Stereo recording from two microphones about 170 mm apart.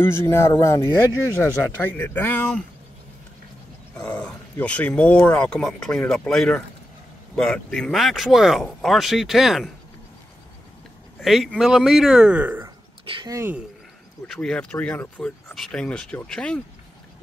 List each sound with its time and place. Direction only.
0.0 s speech: 15° left (ahead or behind)
4.0 s speech: 5° left (ahead or behind)
11.1 s speech: centre (ahead or behind)
13.0 s a sound: 30° right (ahead or behind)
13.3 s speech: 15° right (ahead or behind)
14.2 s speech: 5° left (ahead or behind)